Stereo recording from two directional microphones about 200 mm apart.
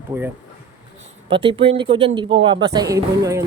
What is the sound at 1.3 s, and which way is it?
Speech, 25° right (ahead or behind).